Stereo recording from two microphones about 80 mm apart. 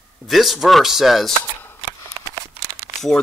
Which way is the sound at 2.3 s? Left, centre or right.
Right.